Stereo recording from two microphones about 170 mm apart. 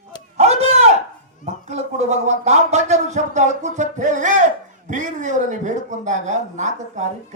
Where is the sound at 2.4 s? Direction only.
40° right (ahead or behind).